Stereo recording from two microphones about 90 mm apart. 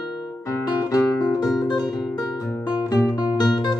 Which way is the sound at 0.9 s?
40° left (ahead or behind).